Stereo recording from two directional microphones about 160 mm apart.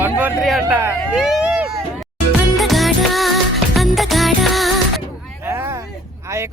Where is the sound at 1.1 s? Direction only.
5° right (ahead or behind).